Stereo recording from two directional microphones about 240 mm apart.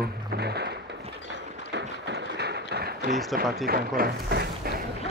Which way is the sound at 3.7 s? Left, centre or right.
Right.